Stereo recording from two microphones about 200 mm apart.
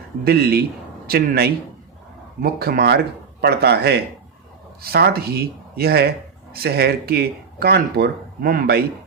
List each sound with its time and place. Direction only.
0.3 s speech: 50° right (ahead or behind)